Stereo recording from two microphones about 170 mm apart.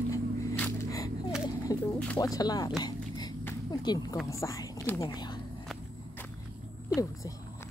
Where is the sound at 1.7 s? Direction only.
20° left (ahead or behind).